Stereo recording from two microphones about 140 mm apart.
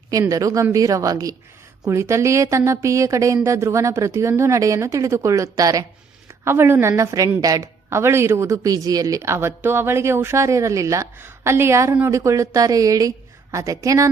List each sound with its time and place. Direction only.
0.1 s a woman's voice: 25° right (ahead or behind)